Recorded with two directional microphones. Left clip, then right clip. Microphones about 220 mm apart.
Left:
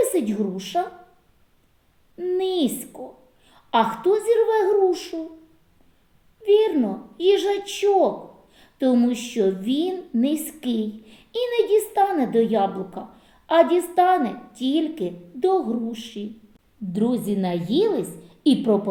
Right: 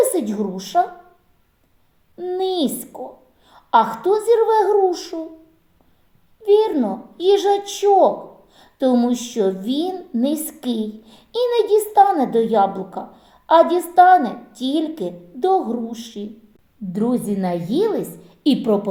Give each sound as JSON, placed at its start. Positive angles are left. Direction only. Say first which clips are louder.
{"t": 0.0, "sound": "a woman's voice", "louder": "right 3 dB", "side_deg": -15}
{"t": 2.4, "sound": "a woman's voice", "louder": "right 5 dB", "side_deg": -15}
{"t": 3.5, "sound": "a sound", "louder": "right 5 dB", "side_deg": -15}
{"t": 4.0, "sound": "a woman's voice", "louder": "right 3 dB", "side_deg": -15}
{"t": 6.4, "sound": "a child's voice", "louder": "right 3 dB", "side_deg": -15}
{"t": 8.5, "sound": "a sound", "louder": "right 3 dB", "side_deg": -15}
{"t": 9.4, "sound": "a woman's voice", "louder": "right 1 dB", "side_deg": -15}
{"t": 16.9, "sound": "a woman's voice", "louder": "right 2 dB", "side_deg": -35}